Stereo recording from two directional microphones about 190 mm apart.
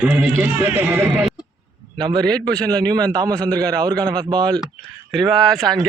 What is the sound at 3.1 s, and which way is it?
Speech, 20° right (ahead or behind).